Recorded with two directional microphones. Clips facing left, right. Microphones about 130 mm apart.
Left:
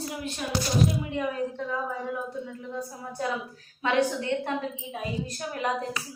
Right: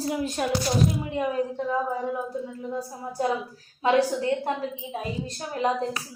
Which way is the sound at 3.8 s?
30° right (ahead or behind).